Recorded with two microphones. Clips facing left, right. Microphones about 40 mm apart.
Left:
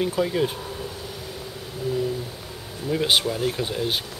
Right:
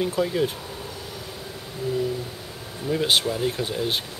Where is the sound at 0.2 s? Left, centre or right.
Centre.